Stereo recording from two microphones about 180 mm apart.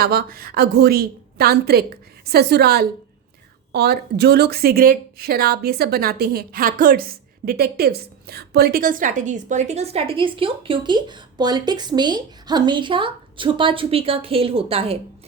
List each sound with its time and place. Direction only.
0.0 s a woman's voice: 60° right (ahead or behind); by 14.9 s 30° right (ahead or behind)